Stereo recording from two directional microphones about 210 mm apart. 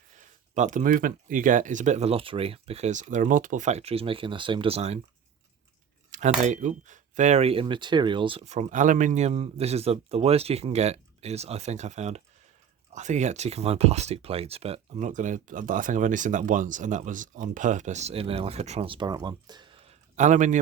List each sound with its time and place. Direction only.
0.5 s speech: 35° right (ahead or behind)
6.1 s speech: 35° right (ahead or behind)
20.1 s speech: 35° right (ahead or behind)